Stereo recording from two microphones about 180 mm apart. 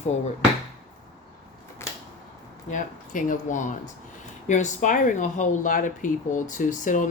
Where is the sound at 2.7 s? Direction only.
45° left (ahead or behind).